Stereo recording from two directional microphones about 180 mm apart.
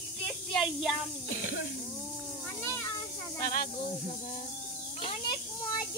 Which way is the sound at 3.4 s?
50° left (ahead or behind).